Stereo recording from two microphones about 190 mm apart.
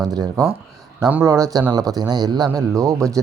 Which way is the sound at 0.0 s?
20° right (ahead or behind).